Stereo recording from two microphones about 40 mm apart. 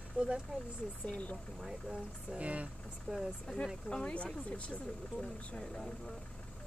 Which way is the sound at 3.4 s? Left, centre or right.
Left.